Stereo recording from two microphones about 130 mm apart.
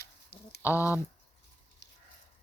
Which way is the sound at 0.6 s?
20° left (ahead or behind).